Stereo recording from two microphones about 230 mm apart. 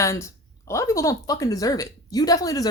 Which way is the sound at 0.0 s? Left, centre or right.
Centre.